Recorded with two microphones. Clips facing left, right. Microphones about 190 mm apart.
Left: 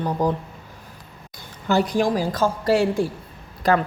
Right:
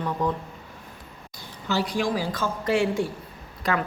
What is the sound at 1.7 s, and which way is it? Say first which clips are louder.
A woman's voice: left 5 dB; 50° left (ahead or behind).